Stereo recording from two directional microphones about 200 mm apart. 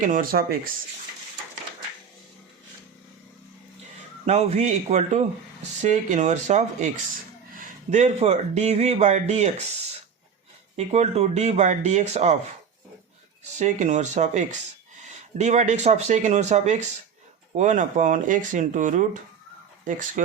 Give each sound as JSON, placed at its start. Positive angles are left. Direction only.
{"t": 0.0, "sound": "speech", "side_deg": -40}
{"t": 4.3, "sound": "speech", "side_deg": -30}
{"t": 10.8, "sound": "speech", "side_deg": -30}
{"t": 13.4, "sound": "speech", "side_deg": -35}